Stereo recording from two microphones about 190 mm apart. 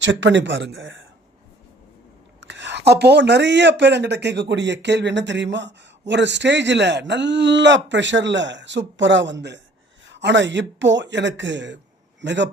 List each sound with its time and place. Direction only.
0.0 s speech: 70° right (ahead or behind); by 1.0 s 90° right
2.4 s speech: 75° right (ahead or behind)